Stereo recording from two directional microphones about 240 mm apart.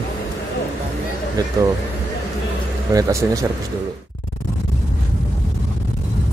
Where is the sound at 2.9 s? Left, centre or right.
Centre.